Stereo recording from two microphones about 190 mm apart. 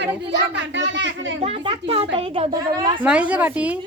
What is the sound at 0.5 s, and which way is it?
Speech, 70° right (ahead or behind).